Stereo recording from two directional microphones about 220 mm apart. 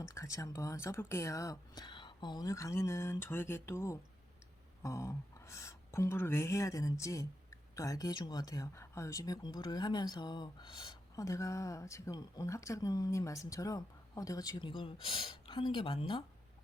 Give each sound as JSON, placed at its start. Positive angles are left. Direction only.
{"t": 0.1, "sound": "speech", "side_deg": 15}